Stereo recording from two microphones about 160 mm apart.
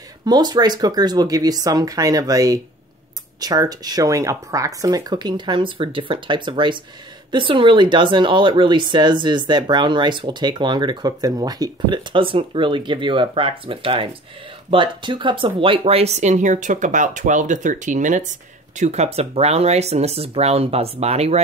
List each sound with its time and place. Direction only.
0.2 s speech: 25° right (ahead or behind); by 21.4 s 40° right (ahead or behind)